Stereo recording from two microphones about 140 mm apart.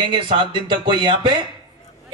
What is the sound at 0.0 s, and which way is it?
A man's voice, 35° right (ahead or behind).